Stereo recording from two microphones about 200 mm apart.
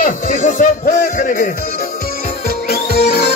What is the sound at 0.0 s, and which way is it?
Music, 45° left (ahead or behind).